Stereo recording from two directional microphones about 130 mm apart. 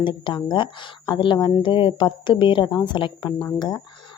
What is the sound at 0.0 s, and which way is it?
Speech, 35° left (ahead or behind).